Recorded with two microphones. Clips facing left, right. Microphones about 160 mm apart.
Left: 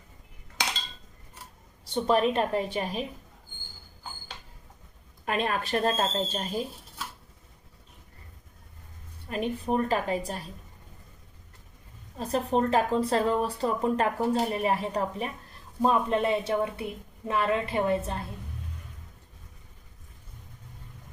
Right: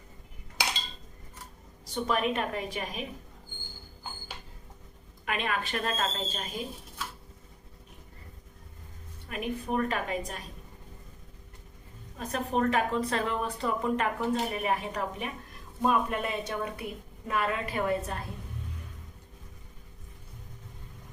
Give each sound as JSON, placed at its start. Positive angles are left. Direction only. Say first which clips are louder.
{"t": 0.6, "sound": "a sound", "louder": "even", "side_deg": -10}
{"t": 1.8, "sound": "a woman's voice", "louder": "left 5 dB", "side_deg": 30}
{"t": 5.2, "sound": "a woman's voice", "louder": "left 3 dB", "side_deg": 35}
{"t": 9.3, "sound": "a woman's voice", "louder": "left 3 dB", "side_deg": 30}
{"t": 12.1, "sound": "a woman's voice", "louder": "left 4 dB", "side_deg": 30}